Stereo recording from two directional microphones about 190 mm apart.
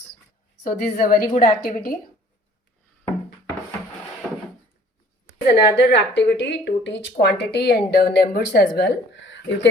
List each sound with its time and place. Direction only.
0.7 s a woman's voice: 50° left (ahead or behind)
5.5 s a woman's voice: 65° left (ahead or behind)